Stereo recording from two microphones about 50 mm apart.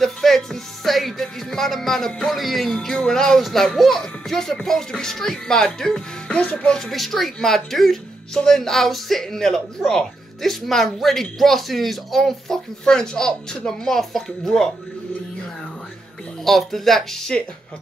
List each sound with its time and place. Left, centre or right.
0.0 s speech: centre
6.3 s speech: left
6.7 s a man's voice: centre
12.8 s speech: centre
16.4 s a man's voice: centre